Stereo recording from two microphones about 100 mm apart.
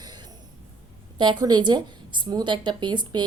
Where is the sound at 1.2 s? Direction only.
50° right (ahead or behind).